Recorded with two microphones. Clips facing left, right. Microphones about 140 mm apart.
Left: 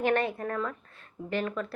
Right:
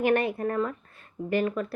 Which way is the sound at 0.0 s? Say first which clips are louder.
Right 3 dB; 10° right (ahead or behind).